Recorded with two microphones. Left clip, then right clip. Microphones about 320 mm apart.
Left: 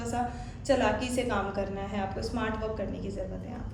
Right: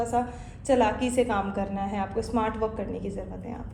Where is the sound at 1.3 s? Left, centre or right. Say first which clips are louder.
Right 2 dB; right.